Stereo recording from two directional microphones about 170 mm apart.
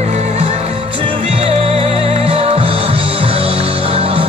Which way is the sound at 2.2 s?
35° right (ahead or behind).